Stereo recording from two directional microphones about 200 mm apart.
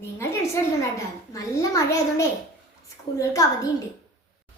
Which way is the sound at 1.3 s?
15° left (ahead or behind).